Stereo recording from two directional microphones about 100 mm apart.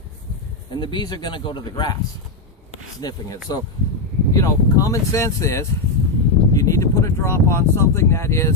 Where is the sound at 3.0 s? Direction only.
40° left (ahead or behind).